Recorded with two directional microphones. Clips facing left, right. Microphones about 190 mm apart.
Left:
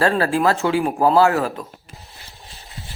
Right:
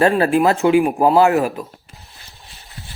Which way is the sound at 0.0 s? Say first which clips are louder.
Right 3 dB; 20° right (ahead or behind).